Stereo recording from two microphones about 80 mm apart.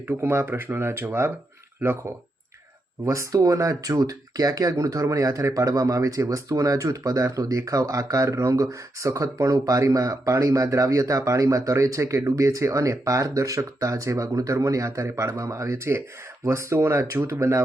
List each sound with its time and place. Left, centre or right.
0.0 s speech: right
3.0 s speech: right